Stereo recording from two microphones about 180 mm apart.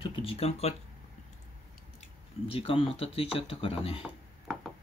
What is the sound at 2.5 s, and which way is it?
Speech, 30° left (ahead or behind).